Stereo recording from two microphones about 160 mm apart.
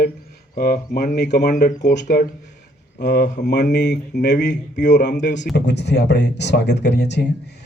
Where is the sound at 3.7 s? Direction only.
90° left.